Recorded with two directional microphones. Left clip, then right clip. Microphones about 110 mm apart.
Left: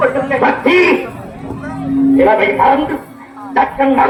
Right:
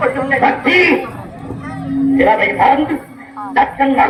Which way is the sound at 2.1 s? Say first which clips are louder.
Left 1 dB; 35° left (ahead or behind).